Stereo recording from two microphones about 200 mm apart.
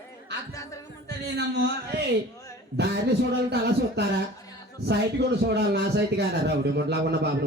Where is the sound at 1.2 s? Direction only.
55° right (ahead or behind).